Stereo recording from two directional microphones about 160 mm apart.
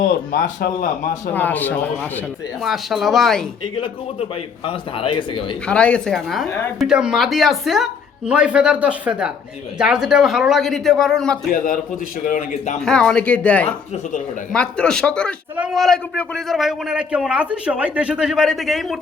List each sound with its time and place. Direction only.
0.0 s speech: 60° left (ahead or behind)
1.3 s speech: 10° left (ahead or behind)
2.6 s a man's voice: centre (ahead or behind)
3.8 s a man's voice: 35° left (ahead or behind)
5.6 s a man's voice: 5° left (ahead or behind)
11.5 s speech: 60° left (ahead or behind)
12.8 s speech: 5° left (ahead or behind)
13.7 s speech: 45° left (ahead or behind)
14.5 s speech: 5° left (ahead or behind)
15.5 s a man's voice: 5° right (ahead or behind)